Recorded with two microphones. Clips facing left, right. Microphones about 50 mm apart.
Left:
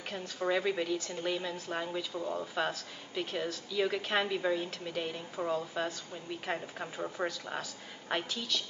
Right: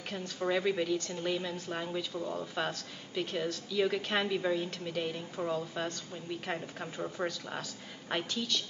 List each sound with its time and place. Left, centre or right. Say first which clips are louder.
0.1 s a woman's voice: even; centre